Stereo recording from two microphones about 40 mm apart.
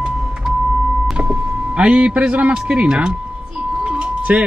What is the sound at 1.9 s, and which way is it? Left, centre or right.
Speech, right.